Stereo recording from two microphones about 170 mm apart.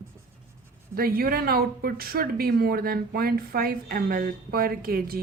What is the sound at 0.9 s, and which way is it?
Speech, 60° right (ahead or behind).